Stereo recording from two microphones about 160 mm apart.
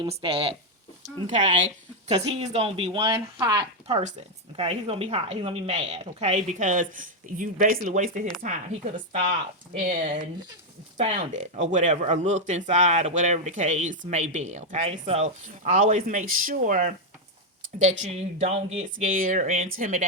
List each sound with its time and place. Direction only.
0.0 s speech: 35° right (ahead or behind)
3.8 s speech: 40° right (ahead or behind)
10.9 s speech: 45° right (ahead or behind)